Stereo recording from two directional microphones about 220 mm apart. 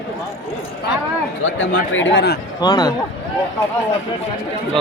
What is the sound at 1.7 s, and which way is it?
Speech, 55° left (ahead or behind).